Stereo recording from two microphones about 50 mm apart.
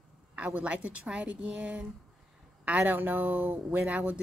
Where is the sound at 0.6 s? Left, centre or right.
Right.